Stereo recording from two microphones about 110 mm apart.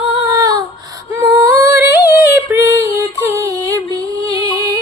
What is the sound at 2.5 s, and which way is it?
Female singing, 30° right (ahead or behind).